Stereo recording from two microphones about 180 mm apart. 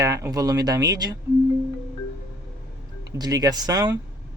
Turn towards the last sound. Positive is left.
turn(degrees=-20)  # may be behind; listen again after turning